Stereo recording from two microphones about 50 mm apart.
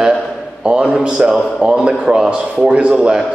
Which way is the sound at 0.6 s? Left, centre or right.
Right.